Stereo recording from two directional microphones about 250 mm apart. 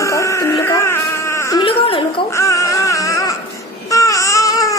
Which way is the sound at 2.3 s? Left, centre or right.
Centre.